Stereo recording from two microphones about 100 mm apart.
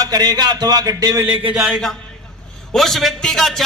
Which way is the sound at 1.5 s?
5° right (ahead or behind).